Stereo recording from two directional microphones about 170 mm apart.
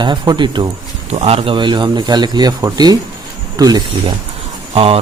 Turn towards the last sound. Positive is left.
turn(degrees=-35)  # may be behind; listen again after turning